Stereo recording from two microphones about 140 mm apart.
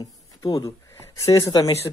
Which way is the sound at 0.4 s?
25° left (ahead or behind).